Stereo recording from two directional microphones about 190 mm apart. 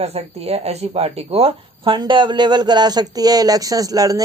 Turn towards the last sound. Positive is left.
turn(degrees=-20)  # may be behind; listen again after turning